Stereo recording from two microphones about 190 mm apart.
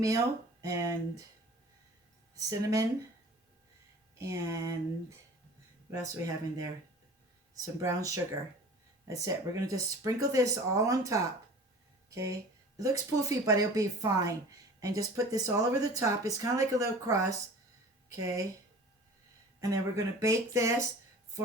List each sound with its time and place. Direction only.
0.6 s speech: 20° right (ahead or behind)
2.3 s speech: 15° right (ahead or behind)
4.2 s speech: 15° right (ahead or behind)
19.5 s speech: 15° right (ahead or behind)